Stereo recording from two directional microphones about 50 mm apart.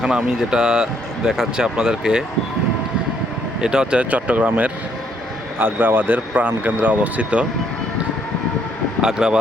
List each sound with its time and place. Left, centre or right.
0.0 s speech: centre
3.6 s speech: centre
4.1 s a man's voice: right
5.5 s a man's voice: right
9.0 s speech: centre